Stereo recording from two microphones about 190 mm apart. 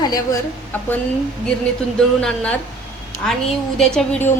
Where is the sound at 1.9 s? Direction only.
5° left (ahead or behind).